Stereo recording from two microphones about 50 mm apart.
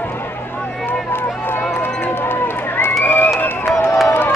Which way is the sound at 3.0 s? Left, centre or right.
Left.